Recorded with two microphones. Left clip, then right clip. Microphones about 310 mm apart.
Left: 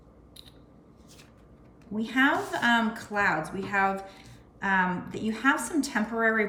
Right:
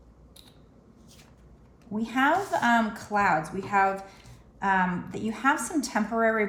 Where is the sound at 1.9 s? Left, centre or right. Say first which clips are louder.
Right 1 dB; centre.